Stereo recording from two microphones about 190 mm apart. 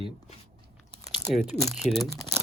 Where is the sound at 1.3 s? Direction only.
Centre (ahead or behind).